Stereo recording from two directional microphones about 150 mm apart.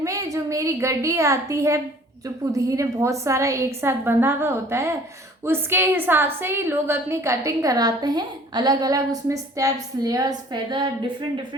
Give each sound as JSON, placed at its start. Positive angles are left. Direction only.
{"t": 0.0, "sound": "a woman's voice", "side_deg": -20}